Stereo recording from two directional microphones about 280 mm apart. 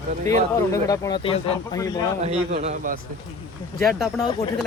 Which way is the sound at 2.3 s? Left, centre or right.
Right.